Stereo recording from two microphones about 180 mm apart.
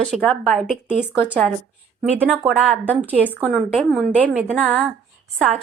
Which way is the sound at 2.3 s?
10° right (ahead or behind).